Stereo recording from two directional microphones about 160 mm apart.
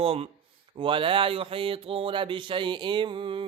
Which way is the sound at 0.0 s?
35° right (ahead or behind).